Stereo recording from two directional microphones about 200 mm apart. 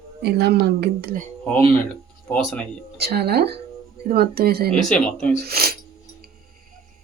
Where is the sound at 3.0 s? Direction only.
50° right (ahead or behind).